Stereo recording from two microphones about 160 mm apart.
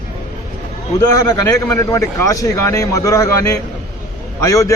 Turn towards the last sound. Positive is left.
turn(degrees=20)  # may be behind; listen again after turning